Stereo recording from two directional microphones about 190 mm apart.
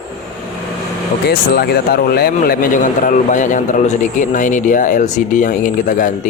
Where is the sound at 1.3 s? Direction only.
55° left (ahead or behind).